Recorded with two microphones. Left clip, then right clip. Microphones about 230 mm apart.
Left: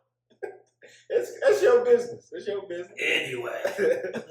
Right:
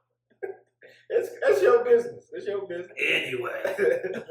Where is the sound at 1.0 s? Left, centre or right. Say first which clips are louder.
Left 1 dB; centre.